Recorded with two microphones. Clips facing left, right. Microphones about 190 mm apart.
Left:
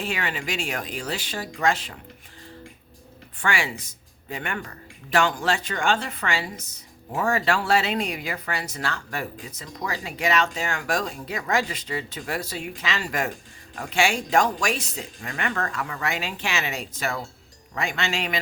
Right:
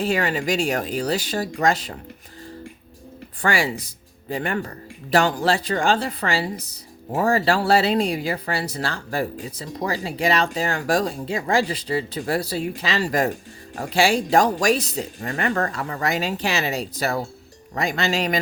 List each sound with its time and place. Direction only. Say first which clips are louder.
0.0 s speech: right 7 dB; 40° right (ahead or behind)
3.4 s speech: right 5 dB; 40° right (ahead or behind)